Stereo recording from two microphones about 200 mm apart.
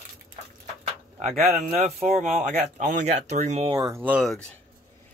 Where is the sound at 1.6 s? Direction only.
35° right (ahead or behind).